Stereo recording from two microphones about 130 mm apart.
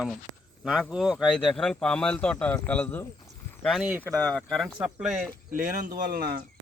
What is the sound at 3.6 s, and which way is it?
Speech, centre (ahead or behind).